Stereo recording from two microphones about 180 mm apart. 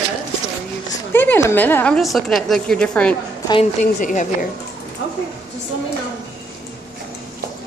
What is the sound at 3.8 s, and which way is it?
Speech, 45° left (ahead or behind).